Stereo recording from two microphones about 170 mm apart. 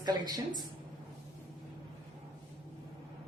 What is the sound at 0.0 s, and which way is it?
Speech, 25° right (ahead or behind).